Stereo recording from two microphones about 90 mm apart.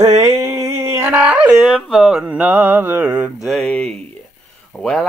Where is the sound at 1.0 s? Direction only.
15° right (ahead or behind).